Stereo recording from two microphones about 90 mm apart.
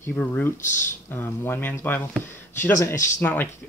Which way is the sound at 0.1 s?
20° left (ahead or behind).